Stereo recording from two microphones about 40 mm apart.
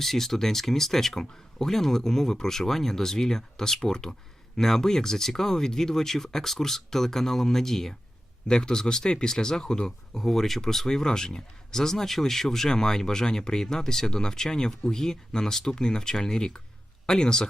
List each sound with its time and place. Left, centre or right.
0.0 s speech: centre
8.4 s speech: centre
10.2 s speech: centre